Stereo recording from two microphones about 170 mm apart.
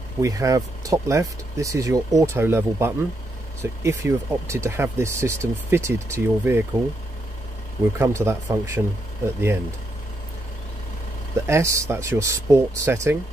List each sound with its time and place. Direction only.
0.2 s speech: 20° right (ahead or behind)
8.0 s speech: 15° right (ahead or behind)
11.4 s speech: 15° right (ahead or behind)